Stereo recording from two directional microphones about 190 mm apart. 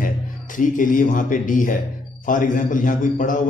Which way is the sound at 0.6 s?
45° left (ahead or behind).